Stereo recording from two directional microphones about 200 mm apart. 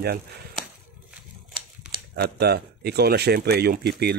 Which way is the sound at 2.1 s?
55° right (ahead or behind).